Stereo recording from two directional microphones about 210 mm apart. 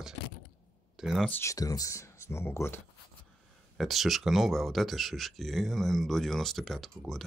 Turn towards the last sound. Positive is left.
turn(degrees=0)  # may be behind; listen again after turning